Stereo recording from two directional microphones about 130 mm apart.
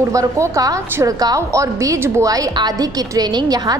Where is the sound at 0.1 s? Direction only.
25° right (ahead or behind).